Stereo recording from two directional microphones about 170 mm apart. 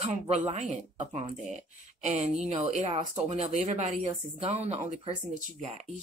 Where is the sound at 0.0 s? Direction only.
40° right (ahead or behind).